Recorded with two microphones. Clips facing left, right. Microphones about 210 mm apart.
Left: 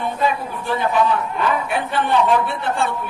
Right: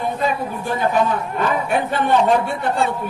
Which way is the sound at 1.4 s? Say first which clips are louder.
Right 2 dB; 45° right (ahead or behind).